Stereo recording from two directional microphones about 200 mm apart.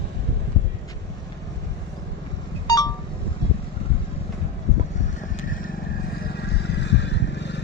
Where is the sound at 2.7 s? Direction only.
20° left (ahead or behind).